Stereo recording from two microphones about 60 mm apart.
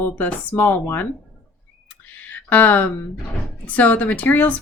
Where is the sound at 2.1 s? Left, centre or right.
Left.